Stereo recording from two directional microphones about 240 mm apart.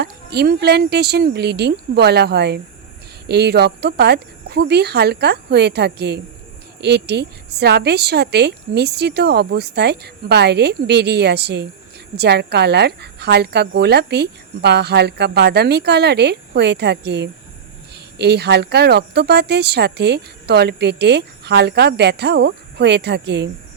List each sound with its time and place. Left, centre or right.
0.0 s speech: right